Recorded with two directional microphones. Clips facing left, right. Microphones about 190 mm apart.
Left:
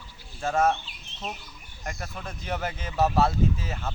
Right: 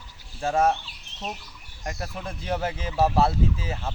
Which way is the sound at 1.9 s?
30° right (ahead or behind).